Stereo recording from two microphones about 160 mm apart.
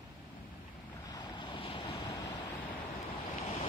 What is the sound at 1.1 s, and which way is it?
Waves, 30° left (ahead or behind).